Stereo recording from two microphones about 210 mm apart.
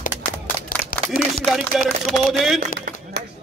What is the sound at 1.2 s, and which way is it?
A man's voice, centre (ahead or behind).